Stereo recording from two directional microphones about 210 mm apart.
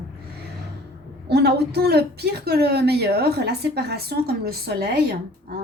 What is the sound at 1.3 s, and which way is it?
A woman's voice, 50° right (ahead or behind).